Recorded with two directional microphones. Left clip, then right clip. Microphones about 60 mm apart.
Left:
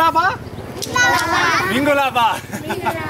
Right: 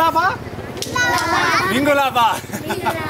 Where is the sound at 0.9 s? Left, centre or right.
Centre.